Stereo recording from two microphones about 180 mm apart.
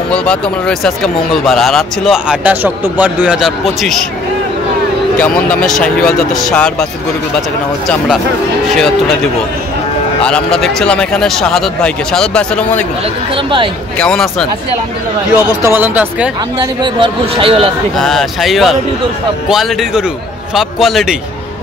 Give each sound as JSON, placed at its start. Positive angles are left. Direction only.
{"t": 0.1, "sound": "speech", "side_deg": 5}
{"t": 5.2, "sound": "speech", "side_deg": 5}
{"t": 8.6, "sound": "speech", "side_deg": 0}
{"t": 10.2, "sound": "speech", "side_deg": 5}
{"t": 13.9, "sound": "speech", "side_deg": 5}
{"t": 15.3, "sound": "speech", "side_deg": -10}
{"t": 16.8, "sound": "speech", "side_deg": -30}
{"t": 17.9, "sound": "speech", "side_deg": 0}